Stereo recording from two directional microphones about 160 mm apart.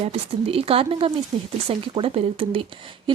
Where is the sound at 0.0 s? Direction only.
40° right (ahead or behind).